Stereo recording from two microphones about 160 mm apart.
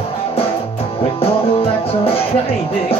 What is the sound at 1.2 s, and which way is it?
Music, 35° left (ahead or behind).